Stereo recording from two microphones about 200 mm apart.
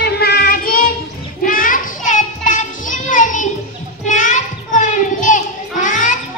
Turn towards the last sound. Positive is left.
turn(degrees=40)  # may be behind; listen again after turning